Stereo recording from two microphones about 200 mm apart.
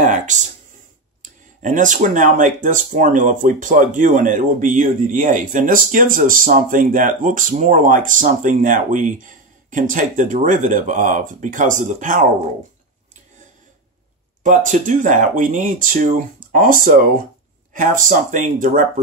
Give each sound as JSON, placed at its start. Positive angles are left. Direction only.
{"t": 0.0, "sound": "a sound", "side_deg": -40}
{"t": 1.6, "sound": "speech", "side_deg": -40}
{"t": 14.4, "sound": "speech", "side_deg": -40}